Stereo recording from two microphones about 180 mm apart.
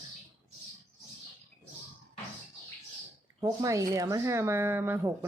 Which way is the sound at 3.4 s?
20° right (ahead or behind).